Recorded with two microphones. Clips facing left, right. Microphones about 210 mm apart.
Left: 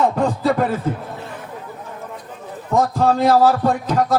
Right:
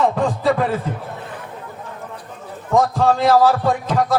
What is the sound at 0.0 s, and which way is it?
Music, 40° left (ahead or behind).